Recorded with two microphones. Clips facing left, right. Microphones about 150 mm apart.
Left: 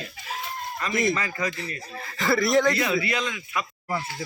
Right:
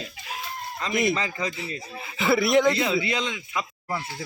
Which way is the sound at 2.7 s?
25° right (ahead or behind).